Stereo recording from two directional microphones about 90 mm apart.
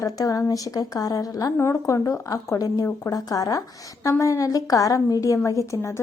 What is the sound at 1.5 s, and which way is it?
A woman's voice, 30° left (ahead or behind).